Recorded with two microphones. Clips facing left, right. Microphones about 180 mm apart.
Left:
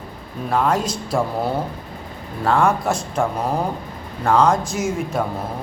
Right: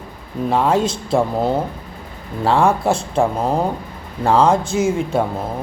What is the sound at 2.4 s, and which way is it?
A man's voice, 30° right (ahead or behind).